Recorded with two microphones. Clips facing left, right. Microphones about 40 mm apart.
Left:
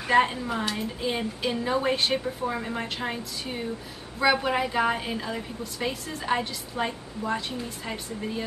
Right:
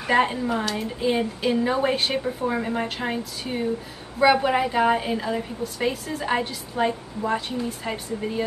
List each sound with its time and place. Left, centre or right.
0.0 s a woman's voice: centre